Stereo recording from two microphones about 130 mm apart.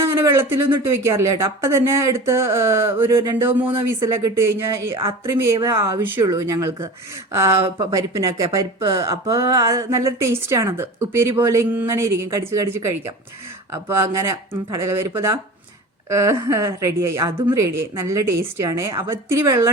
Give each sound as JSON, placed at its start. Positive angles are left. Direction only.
{"t": 0.0, "sound": "a woman's voice", "side_deg": -20}
{"t": 6.1, "sound": "a woman's voice", "side_deg": -30}